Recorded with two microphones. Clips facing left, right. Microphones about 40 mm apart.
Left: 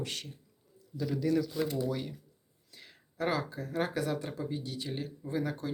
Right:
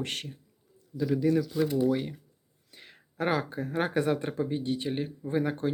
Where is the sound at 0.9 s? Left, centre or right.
Centre.